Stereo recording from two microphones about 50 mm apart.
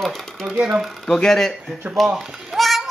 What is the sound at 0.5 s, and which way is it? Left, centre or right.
Speech, centre.